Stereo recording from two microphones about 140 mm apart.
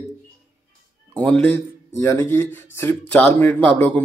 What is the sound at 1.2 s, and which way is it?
Speech, 10° left (ahead or behind).